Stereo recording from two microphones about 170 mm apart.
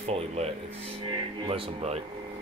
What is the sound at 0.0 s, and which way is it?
Speech, 40° right (ahead or behind).